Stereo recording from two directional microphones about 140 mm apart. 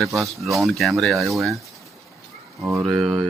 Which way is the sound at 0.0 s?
Centre (ahead or behind).